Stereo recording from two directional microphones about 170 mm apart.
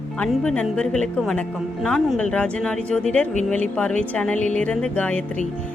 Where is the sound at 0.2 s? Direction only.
5° left (ahead or behind).